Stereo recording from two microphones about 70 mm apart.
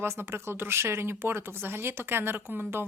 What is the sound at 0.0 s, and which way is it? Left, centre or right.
Speech, right.